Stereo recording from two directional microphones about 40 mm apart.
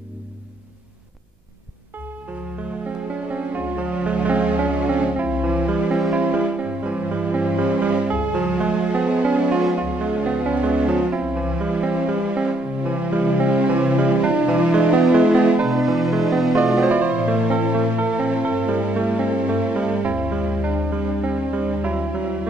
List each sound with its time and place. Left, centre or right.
3.5 s music: right
15.6 s music: centre
16.9 s music: right